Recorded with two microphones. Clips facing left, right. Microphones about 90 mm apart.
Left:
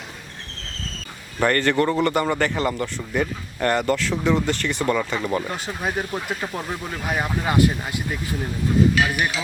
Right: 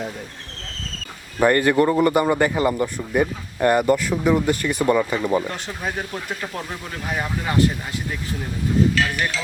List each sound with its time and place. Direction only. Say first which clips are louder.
1.4 s a man's voice: right 3 dB; 10° right (ahead or behind)
5.5 s speech: left 1 dB; 5° left (ahead or behind)
9.0 s speech: left 1 dB; 10° left (ahead or behind)